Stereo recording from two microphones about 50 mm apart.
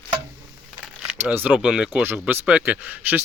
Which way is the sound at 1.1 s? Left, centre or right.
Right.